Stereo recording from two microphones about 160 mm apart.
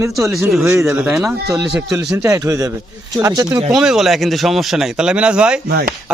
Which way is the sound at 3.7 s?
5° right (ahead or behind).